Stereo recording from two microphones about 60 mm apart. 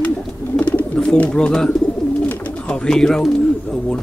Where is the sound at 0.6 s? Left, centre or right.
Left.